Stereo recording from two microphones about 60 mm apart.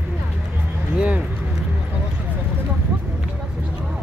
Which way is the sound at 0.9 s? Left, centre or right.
Centre.